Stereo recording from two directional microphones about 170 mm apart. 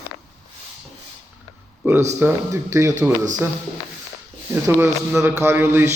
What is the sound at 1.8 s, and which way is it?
A man's voice, 10° right (ahead or behind).